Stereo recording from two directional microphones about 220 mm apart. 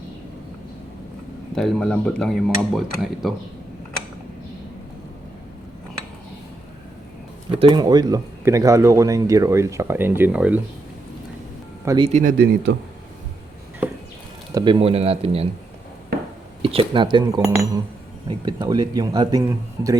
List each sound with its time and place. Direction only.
1.5 s speech: 5° left (ahead or behind)
7.5 s speech: 20° right (ahead or behind)
11.9 s speech: 25° right (ahead or behind)
12.2 s speech: 45° right (ahead or behind)
14.5 s speech: 20° right (ahead or behind)
16.6 s speech: 25° right (ahead or behind)